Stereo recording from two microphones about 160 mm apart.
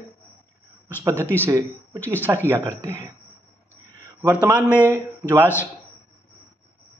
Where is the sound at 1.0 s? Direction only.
15° right (ahead or behind).